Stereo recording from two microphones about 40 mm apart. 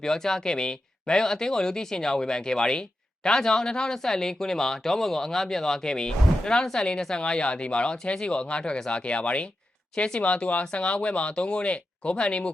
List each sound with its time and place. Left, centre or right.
0.0 s speech: centre